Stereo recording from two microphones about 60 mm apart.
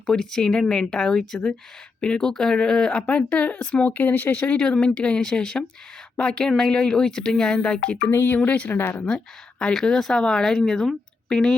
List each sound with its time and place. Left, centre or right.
0.0 s speech: centre; by 4.5 s left
4.5 s speech: centre
8.1 s speech: left
8.4 s speech: left
9.0 s speech: centre